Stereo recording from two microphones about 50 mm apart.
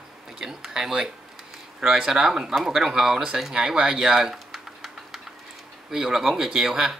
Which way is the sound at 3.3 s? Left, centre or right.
Centre.